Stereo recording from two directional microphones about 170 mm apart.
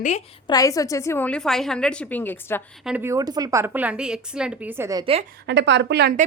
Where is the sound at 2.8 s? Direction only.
10° right (ahead or behind).